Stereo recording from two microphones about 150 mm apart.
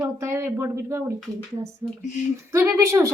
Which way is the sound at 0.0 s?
20° right (ahead or behind).